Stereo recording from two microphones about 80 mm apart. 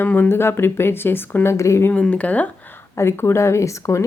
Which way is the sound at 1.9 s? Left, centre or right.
Centre.